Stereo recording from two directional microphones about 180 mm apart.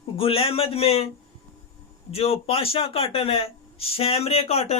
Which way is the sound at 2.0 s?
35° left (ahead or behind).